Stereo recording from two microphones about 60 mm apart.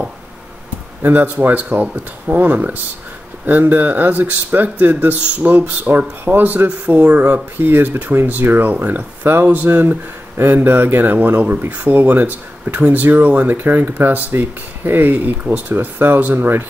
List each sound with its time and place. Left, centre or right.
1.0 s speech: right